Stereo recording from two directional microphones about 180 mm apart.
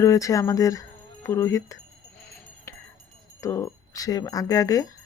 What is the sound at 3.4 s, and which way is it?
Speech, 15° left (ahead or behind).